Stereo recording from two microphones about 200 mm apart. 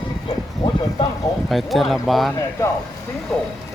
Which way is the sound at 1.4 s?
Centre (ahead or behind).